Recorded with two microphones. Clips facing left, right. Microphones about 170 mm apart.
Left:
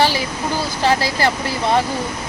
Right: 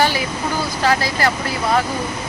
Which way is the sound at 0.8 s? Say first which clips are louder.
Left 1 dB; 25° left (ahead or behind).